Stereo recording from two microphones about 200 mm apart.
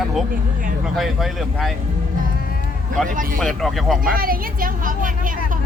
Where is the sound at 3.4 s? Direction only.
Centre (ahead or behind).